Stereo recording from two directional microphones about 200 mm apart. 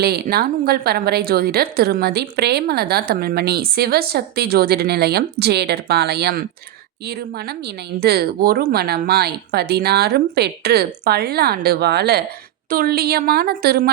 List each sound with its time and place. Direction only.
0.0 s a woman's voice: 50° right (ahead or behind)
7.9 s a woman's voice: 55° right (ahead or behind)